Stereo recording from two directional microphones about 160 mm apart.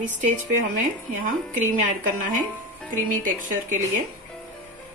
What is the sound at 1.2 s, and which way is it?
A woman's voice, 50° right (ahead or behind).